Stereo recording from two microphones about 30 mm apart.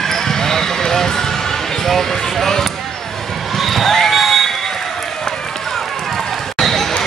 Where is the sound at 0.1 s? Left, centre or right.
Centre.